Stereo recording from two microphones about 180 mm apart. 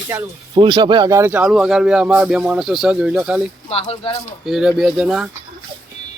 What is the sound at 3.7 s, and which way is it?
Speech, 35° left (ahead or behind).